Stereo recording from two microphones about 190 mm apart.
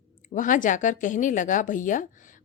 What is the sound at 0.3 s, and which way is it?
A woman's voice, 45° left (ahead or behind).